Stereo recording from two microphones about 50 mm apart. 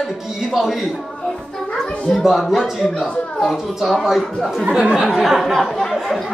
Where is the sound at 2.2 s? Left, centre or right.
Centre.